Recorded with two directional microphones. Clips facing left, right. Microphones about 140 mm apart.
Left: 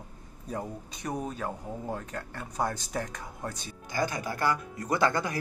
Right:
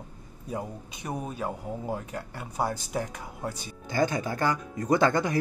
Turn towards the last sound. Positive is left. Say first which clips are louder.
# right 4 dB
turn(degrees=-20)  # may be behind; listen again after turning